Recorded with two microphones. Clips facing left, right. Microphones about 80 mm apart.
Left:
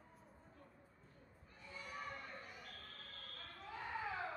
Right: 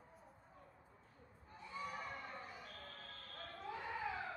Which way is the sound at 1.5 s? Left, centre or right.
Right.